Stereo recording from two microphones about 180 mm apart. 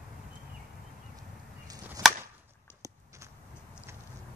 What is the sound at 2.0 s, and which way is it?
Chop, 20° right (ahead or behind).